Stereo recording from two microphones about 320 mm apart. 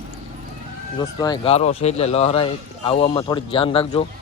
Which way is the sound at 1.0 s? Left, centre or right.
Centre.